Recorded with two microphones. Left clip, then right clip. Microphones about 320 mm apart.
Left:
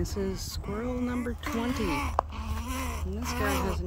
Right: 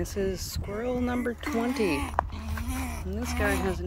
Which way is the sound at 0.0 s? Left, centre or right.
Centre.